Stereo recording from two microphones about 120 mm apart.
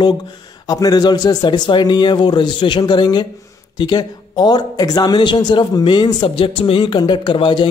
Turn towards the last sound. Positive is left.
turn(degrees=45)  # may be behind; listen again after turning